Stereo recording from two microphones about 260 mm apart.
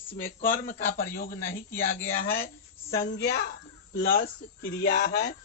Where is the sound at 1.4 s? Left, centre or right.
Centre.